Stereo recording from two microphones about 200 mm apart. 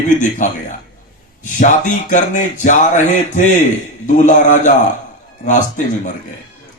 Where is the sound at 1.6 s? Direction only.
40° left (ahead or behind).